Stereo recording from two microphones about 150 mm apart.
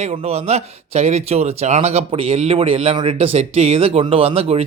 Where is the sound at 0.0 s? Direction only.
45° right (ahead or behind).